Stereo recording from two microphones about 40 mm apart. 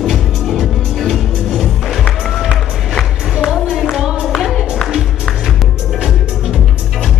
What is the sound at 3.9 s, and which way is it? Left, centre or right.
Music, centre.